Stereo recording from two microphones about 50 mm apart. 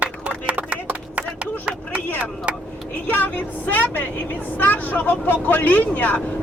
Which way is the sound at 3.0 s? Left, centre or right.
Left.